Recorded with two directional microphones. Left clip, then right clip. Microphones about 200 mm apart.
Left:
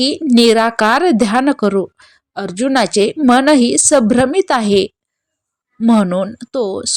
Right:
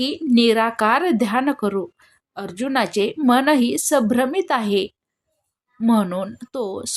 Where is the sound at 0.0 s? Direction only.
30° left (ahead or behind).